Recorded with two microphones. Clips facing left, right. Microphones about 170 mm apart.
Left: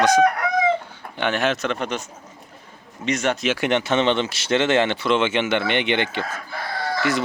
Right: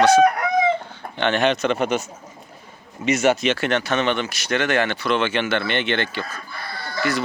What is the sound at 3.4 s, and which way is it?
Speech, 15° left (ahead or behind).